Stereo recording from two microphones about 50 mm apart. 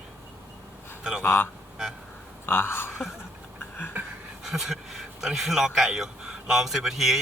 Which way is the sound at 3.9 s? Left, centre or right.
Right.